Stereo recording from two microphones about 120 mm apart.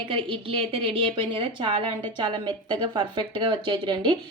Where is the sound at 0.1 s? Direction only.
45° right (ahead or behind).